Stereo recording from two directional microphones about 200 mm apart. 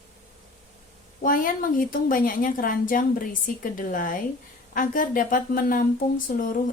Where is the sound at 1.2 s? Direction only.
45° left (ahead or behind).